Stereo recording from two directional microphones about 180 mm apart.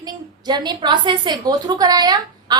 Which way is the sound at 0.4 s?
25° right (ahead or behind).